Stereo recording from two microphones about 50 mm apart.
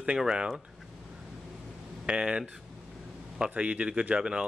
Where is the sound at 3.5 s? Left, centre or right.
Right.